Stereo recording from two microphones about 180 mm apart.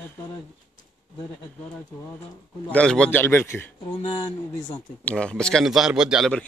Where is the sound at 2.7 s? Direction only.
5° left (ahead or behind); by 4.8 s 20° left (ahead or behind).